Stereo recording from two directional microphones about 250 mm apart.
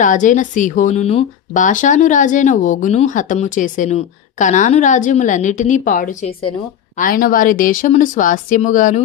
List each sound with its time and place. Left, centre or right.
0.0 s speech: left